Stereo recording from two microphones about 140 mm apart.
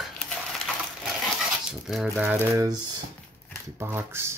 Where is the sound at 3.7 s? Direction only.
15° right (ahead or behind).